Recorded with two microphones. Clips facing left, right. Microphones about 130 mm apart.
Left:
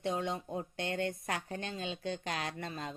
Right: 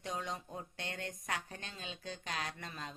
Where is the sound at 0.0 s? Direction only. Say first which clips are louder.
Left 6 dB; 25° left (ahead or behind).